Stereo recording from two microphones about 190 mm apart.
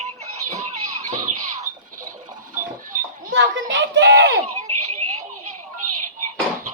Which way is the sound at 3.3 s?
75° right (ahead or behind).